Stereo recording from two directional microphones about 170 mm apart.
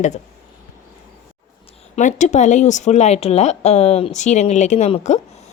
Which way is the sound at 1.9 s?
45° left (ahead or behind).